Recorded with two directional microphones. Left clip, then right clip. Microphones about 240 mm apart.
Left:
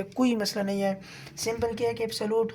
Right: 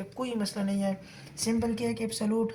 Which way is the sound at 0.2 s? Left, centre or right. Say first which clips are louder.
Left 6 dB; left.